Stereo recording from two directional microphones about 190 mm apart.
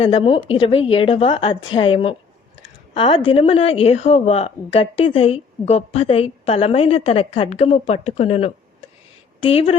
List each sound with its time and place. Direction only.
0.0 s a woman's voice: 30° left (ahead or behind)